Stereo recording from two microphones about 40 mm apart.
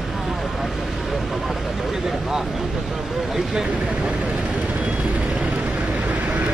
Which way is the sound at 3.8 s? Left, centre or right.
Right.